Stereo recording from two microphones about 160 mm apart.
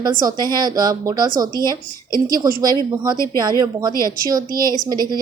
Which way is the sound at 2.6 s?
25° right (ahead or behind).